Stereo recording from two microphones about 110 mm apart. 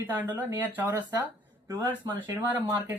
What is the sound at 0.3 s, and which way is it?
Speech, 15° right (ahead or behind).